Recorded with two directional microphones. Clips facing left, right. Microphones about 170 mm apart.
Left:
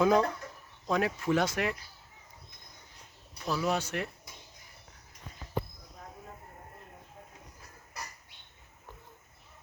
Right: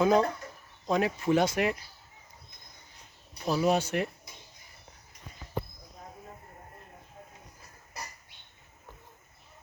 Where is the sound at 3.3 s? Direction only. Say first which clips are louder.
Right 5 dB; 20° right (ahead or behind).